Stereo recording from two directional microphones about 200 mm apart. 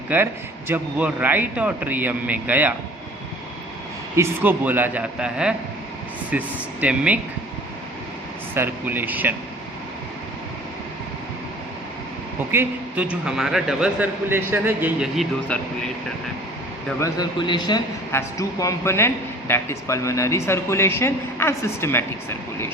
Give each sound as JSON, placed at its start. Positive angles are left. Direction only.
{"t": 0.1, "sound": "a man's voice", "side_deg": -10}
{"t": 4.1, "sound": "a man's voice", "side_deg": -10}
{"t": 8.5, "sound": "a man's voice", "side_deg": -10}
{"t": 12.5, "sound": "a man's voice", "side_deg": -10}
{"t": 17.0, "sound": "a man's voice", "side_deg": 20}